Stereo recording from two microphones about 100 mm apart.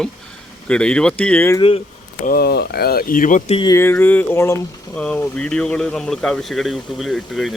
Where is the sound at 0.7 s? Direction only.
10° left (ahead or behind).